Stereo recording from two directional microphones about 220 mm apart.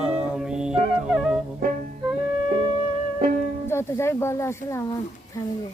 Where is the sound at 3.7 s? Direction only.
10° left (ahead or behind).